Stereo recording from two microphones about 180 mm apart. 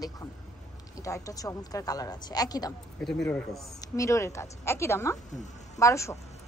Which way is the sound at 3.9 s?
15° left (ahead or behind).